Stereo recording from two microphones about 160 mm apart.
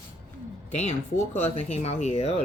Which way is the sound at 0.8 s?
45° left (ahead or behind).